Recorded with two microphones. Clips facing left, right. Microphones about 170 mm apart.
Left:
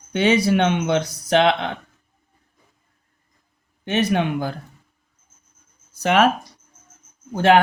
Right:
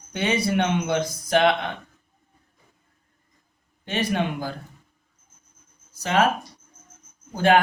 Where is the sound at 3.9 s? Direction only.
70° left (ahead or behind).